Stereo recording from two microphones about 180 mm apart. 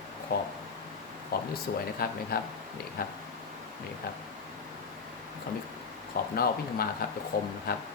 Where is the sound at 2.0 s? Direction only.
55° left (ahead or behind).